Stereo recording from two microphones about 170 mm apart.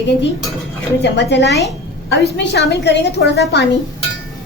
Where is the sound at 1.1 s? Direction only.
90° left.